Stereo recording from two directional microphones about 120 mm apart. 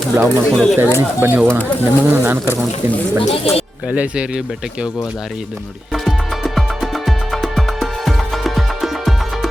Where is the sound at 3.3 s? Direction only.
55° left (ahead or behind).